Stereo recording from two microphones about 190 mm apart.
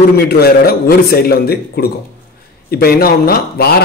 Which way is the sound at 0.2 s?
55° left (ahead or behind).